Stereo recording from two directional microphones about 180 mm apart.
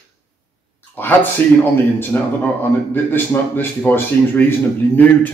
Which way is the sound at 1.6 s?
10° left (ahead or behind).